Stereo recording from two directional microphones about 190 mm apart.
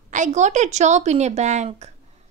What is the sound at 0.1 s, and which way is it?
Speech, 40° right (ahead or behind).